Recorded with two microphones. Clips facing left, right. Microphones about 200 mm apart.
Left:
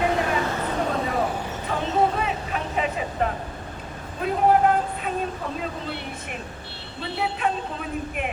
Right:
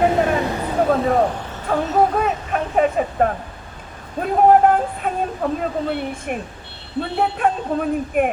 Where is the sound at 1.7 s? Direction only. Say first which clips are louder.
Right 5 dB; 50° right (ahead or behind).